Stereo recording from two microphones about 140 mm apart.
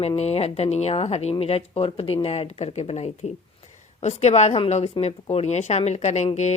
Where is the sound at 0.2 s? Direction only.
50° left (ahead or behind).